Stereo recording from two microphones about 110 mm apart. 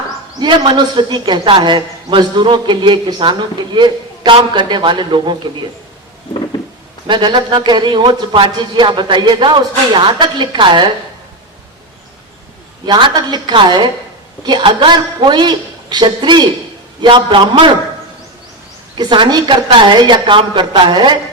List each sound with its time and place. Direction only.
0.3 s a man's voice: 45° right (ahead or behind)
7.1 s a man's voice: 45° right (ahead or behind)
12.8 s a man's voice: 45° right (ahead or behind)
18.9 s a man's voice: 45° right (ahead or behind)